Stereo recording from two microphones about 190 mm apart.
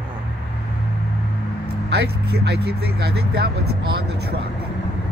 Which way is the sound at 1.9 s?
60° right (ahead or behind).